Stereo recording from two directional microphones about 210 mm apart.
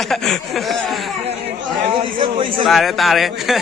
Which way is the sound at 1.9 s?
25° right (ahead or behind).